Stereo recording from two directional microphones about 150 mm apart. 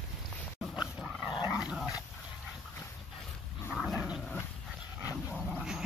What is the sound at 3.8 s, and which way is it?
Dog, centre (ahead or behind).